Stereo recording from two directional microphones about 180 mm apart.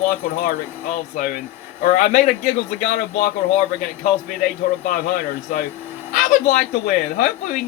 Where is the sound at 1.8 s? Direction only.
45° left (ahead or behind).